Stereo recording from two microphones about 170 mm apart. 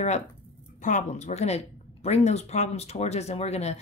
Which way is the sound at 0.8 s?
45° left (ahead or behind).